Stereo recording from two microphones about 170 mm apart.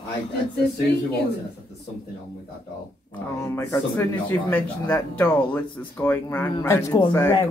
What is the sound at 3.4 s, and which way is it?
A woman's voice, 15° left (ahead or behind).